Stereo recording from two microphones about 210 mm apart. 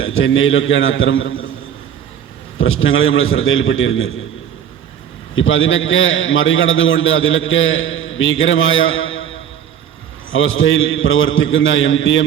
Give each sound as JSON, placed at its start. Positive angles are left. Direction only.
{"t": 0.0, "sound": "a man's voice", "side_deg": 75}
{"t": 2.6, "sound": "a man's voice", "side_deg": 75}
{"t": 5.3, "sound": "a man's voice", "side_deg": 70}